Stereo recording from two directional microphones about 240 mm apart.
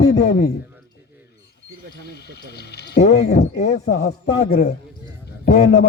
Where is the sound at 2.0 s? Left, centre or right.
Left.